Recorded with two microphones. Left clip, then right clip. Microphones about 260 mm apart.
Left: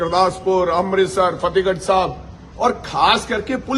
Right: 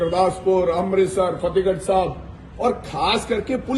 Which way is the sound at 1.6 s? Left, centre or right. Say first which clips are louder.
Left 2 dB; left.